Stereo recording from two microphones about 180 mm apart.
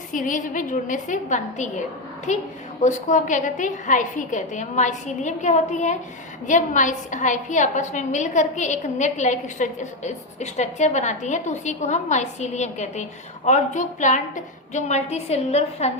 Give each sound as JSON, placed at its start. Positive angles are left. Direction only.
{"t": 0.1, "sound": "a woman's voice", "side_deg": 45}